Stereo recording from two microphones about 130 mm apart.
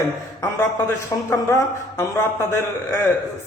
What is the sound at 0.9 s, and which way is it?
Speech, 20° left (ahead or behind).